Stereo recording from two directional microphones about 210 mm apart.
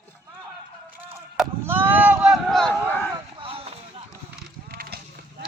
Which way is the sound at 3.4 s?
25° right (ahead or behind).